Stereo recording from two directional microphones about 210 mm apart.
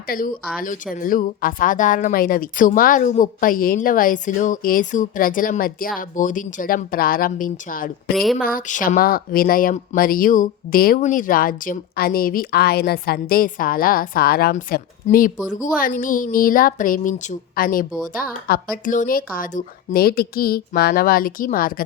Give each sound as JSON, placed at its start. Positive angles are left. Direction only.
{"t": 0.1, "sound": "speech", "side_deg": 45}
{"t": 8.1, "sound": "speech", "side_deg": 0}
{"t": 8.4, "sound": "speech", "side_deg": 40}